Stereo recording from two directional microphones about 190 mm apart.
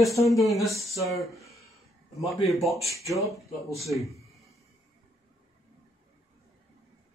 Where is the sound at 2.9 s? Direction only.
15° left (ahead or behind).